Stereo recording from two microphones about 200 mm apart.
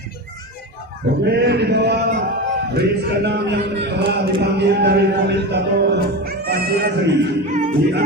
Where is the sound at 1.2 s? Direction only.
55° right (ahead or behind).